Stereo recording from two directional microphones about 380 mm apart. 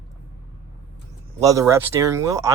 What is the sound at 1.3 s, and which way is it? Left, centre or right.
Speech, centre.